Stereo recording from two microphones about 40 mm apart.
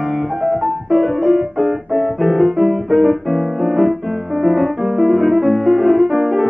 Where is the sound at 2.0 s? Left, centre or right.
Centre.